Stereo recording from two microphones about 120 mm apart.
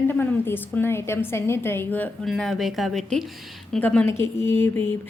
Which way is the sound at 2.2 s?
Centre (ahead or behind).